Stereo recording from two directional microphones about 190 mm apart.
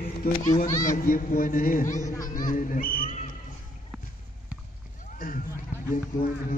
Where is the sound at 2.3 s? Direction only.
45° left (ahead or behind).